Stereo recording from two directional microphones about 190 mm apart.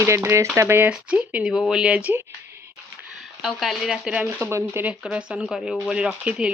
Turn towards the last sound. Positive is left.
turn(degrees=-5)  # may be behind; listen again after turning